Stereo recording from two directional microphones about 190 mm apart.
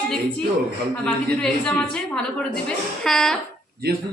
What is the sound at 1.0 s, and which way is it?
A woman's voice, 5° left (ahead or behind).